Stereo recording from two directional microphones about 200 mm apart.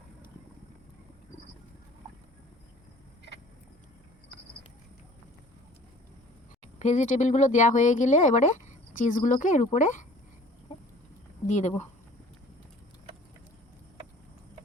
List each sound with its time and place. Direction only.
6.7 s speech: 35° left (ahead or behind)
11.4 s speech: 35° left (ahead or behind)